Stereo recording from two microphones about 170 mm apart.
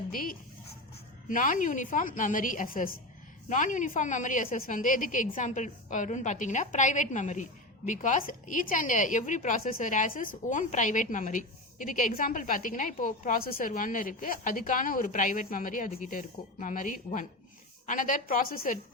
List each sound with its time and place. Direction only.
0.1 s a woman's voice: 60° left (ahead or behind)